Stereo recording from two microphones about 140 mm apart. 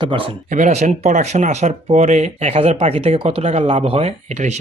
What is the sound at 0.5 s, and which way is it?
Speech, 60° right (ahead or behind).